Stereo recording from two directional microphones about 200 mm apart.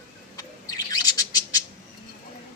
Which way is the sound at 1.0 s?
20° left (ahead or behind).